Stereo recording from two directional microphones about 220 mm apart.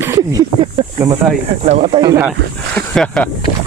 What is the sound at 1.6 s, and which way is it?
Speech, 30° right (ahead or behind).